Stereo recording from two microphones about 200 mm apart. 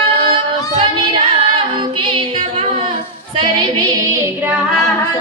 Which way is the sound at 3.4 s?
25° right (ahead or behind).